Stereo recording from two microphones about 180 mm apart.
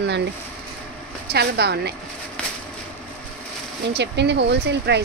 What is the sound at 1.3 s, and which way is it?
Speech, 65° right (ahead or behind).